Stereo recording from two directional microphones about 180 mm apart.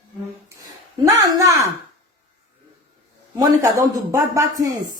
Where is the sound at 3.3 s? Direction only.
20° right (ahead or behind).